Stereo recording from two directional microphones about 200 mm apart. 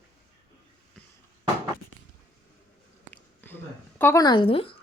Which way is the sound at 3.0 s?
10° left (ahead or behind).